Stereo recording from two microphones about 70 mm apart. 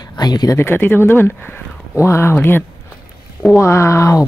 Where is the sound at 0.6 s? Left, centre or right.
Left.